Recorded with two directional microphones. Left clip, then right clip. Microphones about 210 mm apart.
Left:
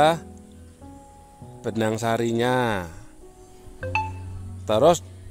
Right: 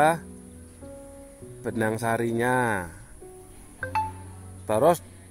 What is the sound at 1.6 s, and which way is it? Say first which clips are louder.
Speech: left 2 dB; 45° left (ahead or behind).